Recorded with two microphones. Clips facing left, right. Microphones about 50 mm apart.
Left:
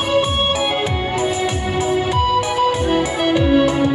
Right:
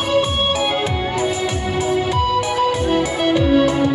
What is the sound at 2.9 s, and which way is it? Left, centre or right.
Music, left.